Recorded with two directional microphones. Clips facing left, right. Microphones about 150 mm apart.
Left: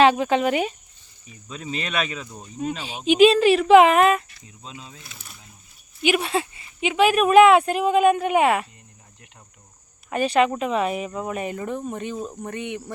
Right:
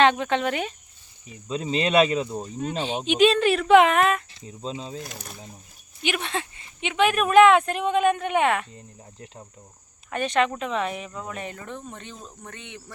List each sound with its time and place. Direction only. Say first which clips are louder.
0.0 s speech: left 3 dB; 5° left (ahead or behind)
1.5 s speech: right 6 dB; 30° right (ahead or behind)
2.6 s a woman's voice: even; 5° left (ahead or behind)
4.4 s speech: right 8 dB; 30° right (ahead or behind)
6.0 s speech: left 6 dB; 5° left (ahead or behind)
10.1 s speech: left 4 dB; 10° left (ahead or behind)